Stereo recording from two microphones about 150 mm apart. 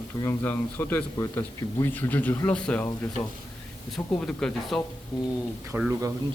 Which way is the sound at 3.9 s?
5° left (ahead or behind).